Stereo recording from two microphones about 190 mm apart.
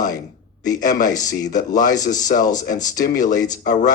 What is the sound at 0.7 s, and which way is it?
Speech, 20° left (ahead or behind).